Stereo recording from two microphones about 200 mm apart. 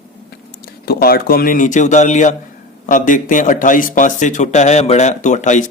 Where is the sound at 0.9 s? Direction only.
50° left (ahead or behind).